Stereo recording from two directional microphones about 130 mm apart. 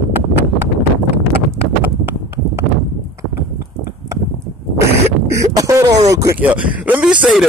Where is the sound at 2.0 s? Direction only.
15° right (ahead or behind).